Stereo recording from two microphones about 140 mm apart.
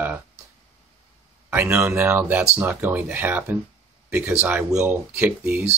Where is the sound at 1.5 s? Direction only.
15° right (ahead or behind).